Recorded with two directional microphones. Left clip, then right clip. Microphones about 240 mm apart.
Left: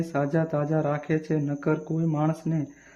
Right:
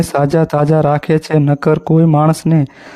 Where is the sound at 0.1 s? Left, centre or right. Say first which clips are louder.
Right 13 dB; right.